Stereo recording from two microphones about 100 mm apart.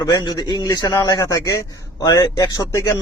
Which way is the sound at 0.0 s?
40° left (ahead or behind).